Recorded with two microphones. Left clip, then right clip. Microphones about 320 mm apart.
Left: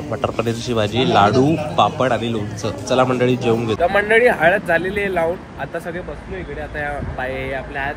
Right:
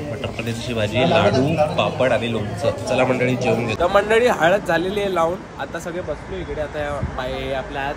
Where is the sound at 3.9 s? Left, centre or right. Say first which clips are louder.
Left 1 dB; centre.